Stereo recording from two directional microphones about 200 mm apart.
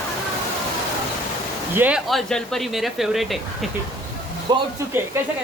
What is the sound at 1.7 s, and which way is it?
Speech, 10° right (ahead or behind).